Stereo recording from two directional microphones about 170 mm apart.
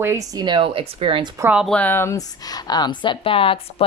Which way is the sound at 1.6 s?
10° left (ahead or behind).